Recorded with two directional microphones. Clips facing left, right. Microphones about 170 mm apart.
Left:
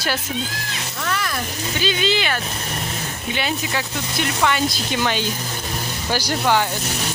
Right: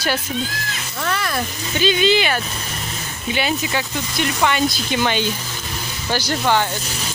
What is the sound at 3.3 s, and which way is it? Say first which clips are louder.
Speech: right 3 dB; 5° right (ahead or behind).